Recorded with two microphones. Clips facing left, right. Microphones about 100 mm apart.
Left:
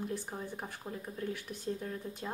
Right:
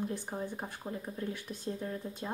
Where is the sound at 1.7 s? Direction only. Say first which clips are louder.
Left 1 dB; 25° right (ahead or behind).